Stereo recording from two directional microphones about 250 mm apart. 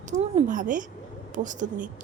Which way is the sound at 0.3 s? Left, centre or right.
Right.